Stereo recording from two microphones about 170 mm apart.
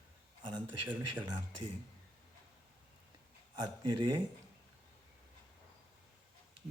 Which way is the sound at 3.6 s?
25° right (ahead or behind).